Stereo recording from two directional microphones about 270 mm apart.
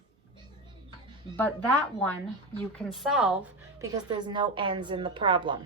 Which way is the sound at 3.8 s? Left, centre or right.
Centre.